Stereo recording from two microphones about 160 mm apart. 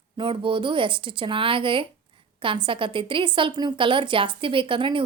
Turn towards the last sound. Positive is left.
turn(degrees=-30)  # may be behind; listen again after turning